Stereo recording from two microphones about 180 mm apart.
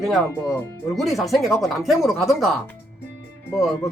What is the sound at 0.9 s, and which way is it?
Speech, centre (ahead or behind).